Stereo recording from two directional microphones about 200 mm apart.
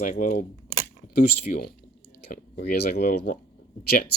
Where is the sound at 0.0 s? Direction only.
40° left (ahead or behind).